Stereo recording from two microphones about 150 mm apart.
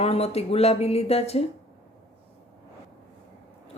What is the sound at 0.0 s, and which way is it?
Speech, 45° left (ahead or behind).